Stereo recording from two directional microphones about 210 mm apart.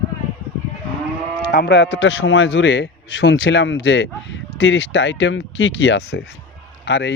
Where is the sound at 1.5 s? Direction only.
50° left (ahead or behind).